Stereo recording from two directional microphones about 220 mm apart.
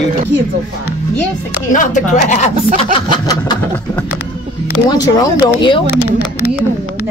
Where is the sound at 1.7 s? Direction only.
35° left (ahead or behind).